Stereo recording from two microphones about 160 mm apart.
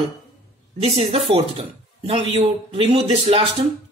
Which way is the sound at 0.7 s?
40° right (ahead or behind).